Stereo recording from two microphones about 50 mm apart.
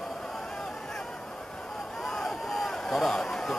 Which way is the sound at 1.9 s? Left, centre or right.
Centre.